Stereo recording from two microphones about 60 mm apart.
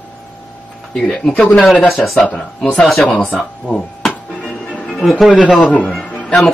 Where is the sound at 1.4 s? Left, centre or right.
Left.